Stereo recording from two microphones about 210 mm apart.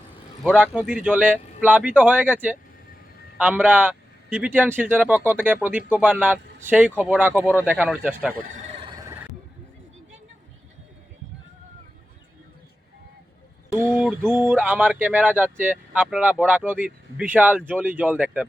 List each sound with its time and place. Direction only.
0.4 s speech: 5° right (ahead or behind)
8.4 s a sound: 35° right (ahead or behind)
14.0 s speech: 10° right (ahead or behind)